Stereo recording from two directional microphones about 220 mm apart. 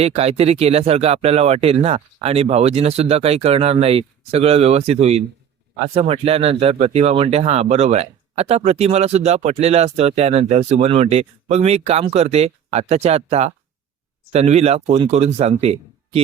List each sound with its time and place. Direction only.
0.0 s speech: 30° right (ahead or behind)